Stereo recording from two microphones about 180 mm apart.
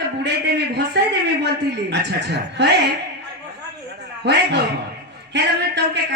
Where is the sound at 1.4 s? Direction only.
70° right (ahead or behind).